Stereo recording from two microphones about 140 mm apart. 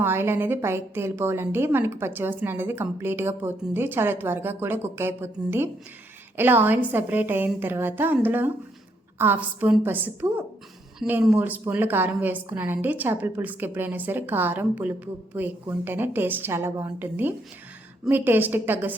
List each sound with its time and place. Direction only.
0.0 s a woman's voice: 15° right (ahead or behind)